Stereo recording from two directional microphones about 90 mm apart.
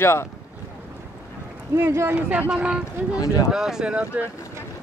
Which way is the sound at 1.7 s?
25° right (ahead or behind).